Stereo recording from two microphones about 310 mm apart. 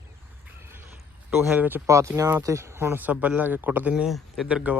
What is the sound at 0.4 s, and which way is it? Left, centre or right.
Creak, centre.